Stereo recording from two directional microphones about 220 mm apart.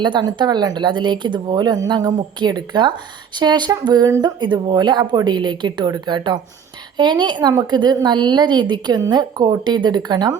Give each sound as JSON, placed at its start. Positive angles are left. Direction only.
{"t": 0.0, "sound": "a woman's voice", "side_deg": -20}